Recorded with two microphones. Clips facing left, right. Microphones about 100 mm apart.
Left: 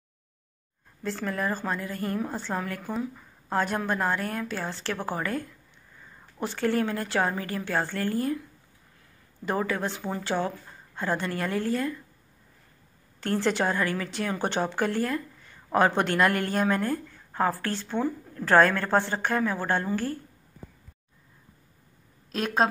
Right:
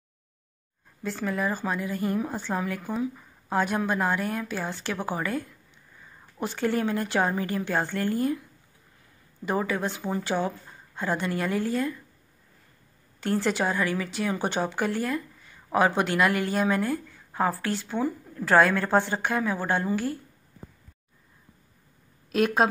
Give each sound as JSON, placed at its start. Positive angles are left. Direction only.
{"t": 1.0, "sound": "speech", "side_deg": -5}
{"t": 6.4, "sound": "speech", "side_deg": -15}
{"t": 9.5, "sound": "speech", "side_deg": -15}
{"t": 13.2, "sound": "speech", "side_deg": -10}
{"t": 22.3, "sound": "speech", "side_deg": -5}